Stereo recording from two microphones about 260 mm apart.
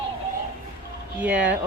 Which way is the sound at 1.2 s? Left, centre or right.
Centre.